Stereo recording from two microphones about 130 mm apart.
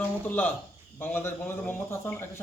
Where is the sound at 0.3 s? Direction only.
15° left (ahead or behind).